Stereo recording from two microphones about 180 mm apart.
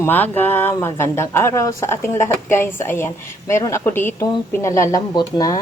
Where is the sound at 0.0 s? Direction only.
10° left (ahead or behind).